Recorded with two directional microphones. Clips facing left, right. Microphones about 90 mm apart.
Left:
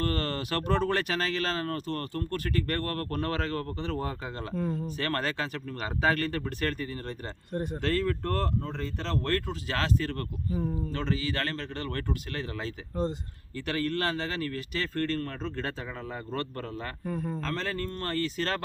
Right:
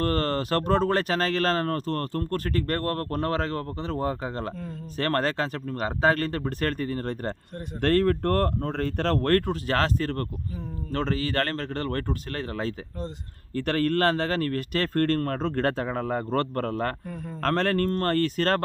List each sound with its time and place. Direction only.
0.0 s speech: 40° right (ahead or behind)